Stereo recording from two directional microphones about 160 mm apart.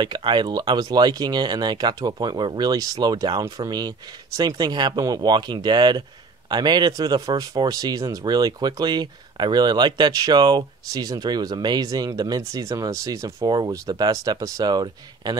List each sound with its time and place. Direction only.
0.0 s speech: 25° right (ahead or behind)